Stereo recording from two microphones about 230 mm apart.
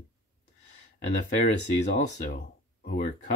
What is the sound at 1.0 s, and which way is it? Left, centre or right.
Speech, left.